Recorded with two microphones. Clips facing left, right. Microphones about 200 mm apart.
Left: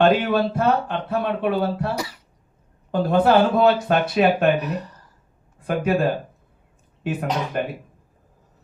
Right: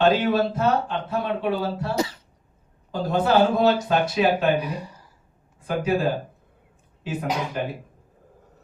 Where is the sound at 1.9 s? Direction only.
25° right (ahead or behind).